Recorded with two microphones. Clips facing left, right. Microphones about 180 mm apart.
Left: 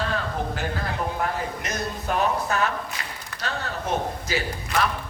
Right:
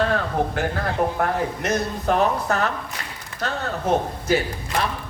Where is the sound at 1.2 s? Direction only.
60° right (ahead or behind).